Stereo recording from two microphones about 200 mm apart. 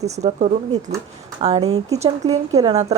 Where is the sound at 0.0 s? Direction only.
35° right (ahead or behind).